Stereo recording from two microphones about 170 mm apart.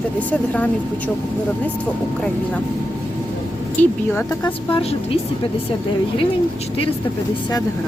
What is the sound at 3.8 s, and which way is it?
Speech, 10° left (ahead or behind).